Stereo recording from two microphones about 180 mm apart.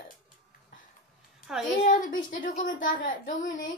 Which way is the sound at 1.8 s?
45° left (ahead or behind).